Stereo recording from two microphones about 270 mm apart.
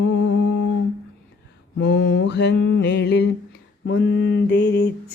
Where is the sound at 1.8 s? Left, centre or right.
Left.